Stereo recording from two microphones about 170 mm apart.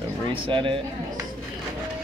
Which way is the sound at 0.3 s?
30° right (ahead or behind).